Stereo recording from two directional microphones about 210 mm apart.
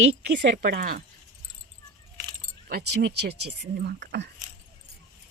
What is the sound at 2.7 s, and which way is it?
Speech, 50° right (ahead or behind).